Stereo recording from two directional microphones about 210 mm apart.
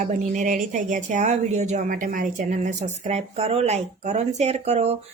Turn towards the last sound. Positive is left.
turn(degrees=-30)  # may be behind; listen again after turning